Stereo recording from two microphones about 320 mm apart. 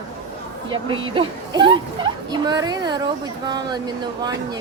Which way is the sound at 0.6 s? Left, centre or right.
Centre.